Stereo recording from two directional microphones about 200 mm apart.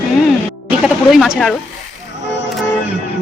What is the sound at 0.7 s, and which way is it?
Speech, centre (ahead or behind).